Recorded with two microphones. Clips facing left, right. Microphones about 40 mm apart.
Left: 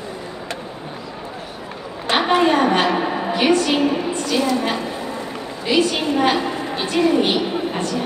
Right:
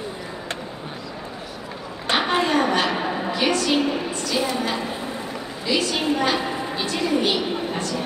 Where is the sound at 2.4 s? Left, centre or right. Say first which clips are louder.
Left 4 dB; left.